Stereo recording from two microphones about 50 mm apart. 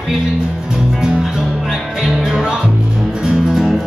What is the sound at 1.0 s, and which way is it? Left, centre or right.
Music, centre.